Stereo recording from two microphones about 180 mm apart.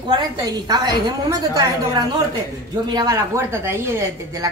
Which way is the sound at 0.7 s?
25° right (ahead or behind).